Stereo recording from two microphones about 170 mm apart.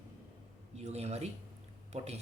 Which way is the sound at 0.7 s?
40° right (ahead or behind).